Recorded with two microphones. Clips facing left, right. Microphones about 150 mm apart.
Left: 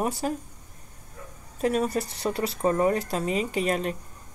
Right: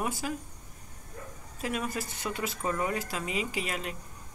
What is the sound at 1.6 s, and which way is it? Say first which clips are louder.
Speech: left 8 dB; 35° left (ahead or behind).